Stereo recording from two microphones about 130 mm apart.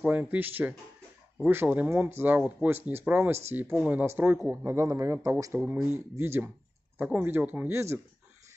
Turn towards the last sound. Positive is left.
turn(degrees=-20)  # may be behind; listen again after turning